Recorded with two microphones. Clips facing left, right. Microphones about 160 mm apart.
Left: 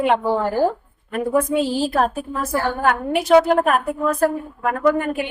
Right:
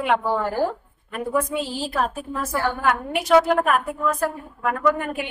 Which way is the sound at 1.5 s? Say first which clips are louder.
Left 7 dB; 40° left (ahead or behind).